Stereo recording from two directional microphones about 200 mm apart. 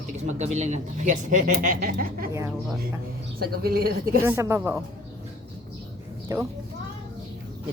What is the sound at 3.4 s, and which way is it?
Speech, 50° right (ahead or behind).